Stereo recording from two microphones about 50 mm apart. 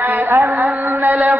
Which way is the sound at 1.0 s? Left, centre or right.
Right.